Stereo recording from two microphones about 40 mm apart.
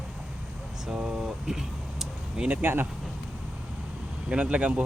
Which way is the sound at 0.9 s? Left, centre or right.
Centre.